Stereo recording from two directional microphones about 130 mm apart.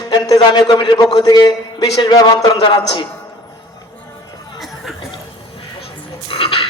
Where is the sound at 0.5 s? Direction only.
35° left (ahead or behind).